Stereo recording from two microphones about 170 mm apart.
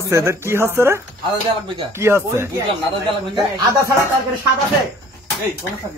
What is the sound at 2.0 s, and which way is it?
Speech, 15° right (ahead or behind).